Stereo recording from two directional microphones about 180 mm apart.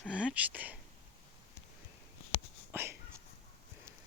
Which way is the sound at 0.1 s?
5° right (ahead or behind).